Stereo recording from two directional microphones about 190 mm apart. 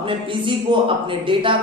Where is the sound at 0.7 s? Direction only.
25° right (ahead or behind).